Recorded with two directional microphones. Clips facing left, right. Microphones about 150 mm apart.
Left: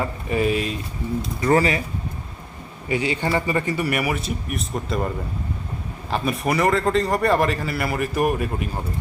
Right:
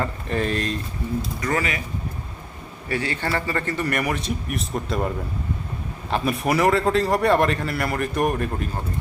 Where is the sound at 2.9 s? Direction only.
15° left (ahead or behind); by 5.1 s centre (ahead or behind).